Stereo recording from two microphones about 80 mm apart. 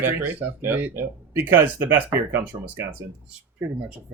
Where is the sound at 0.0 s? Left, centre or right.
Right.